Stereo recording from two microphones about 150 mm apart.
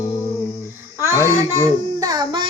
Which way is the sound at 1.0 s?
20° right (ahead or behind).